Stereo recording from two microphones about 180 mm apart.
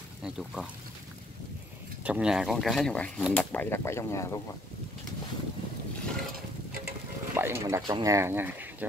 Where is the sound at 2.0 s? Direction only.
5° right (ahead or behind); by 4.4 s 15° left (ahead or behind).